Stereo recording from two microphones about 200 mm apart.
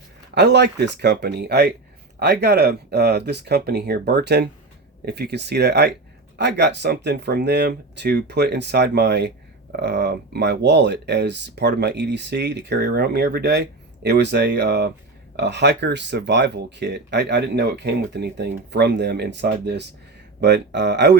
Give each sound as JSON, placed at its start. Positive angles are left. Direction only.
{"t": 0.3, "sound": "speech", "side_deg": -55}